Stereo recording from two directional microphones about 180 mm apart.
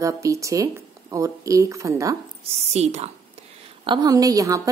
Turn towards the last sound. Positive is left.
turn(degrees=-20)  # may be behind; listen again after turning